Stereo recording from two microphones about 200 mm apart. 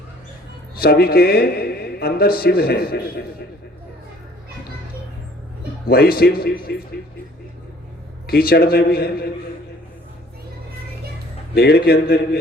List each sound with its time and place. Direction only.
0.8 s speech: 50° left (ahead or behind)
5.9 s speech: 50° left (ahead or behind)
8.3 s speech: 50° left (ahead or behind)
11.5 s speech: 50° left (ahead or behind)